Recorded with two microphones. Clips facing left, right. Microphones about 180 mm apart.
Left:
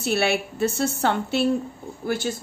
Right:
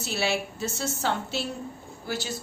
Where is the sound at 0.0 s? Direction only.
60° left (ahead or behind).